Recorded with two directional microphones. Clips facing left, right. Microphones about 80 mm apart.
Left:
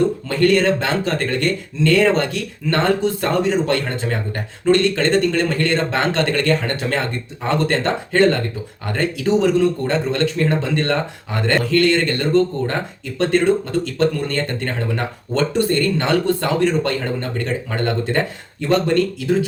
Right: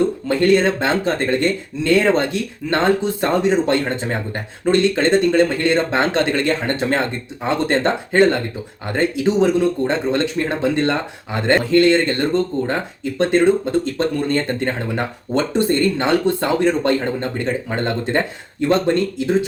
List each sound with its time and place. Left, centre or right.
0.3 s speech: right